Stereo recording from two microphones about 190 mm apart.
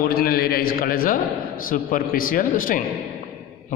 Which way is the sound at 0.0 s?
50° left (ahead or behind).